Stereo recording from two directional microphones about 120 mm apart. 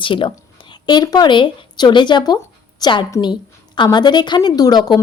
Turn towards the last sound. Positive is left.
turn(degrees=35)  # may be behind; listen again after turning